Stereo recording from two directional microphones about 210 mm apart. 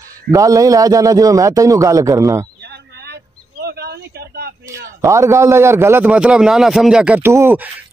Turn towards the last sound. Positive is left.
turn(degrees=-10)  # may be behind; listen again after turning